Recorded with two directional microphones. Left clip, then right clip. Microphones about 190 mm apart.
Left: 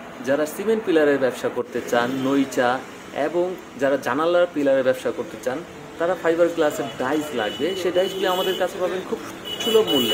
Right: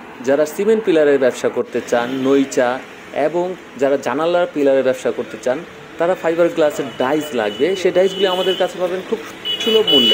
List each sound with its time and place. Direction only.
0.2 s a man's voice: 25° right (ahead or behind)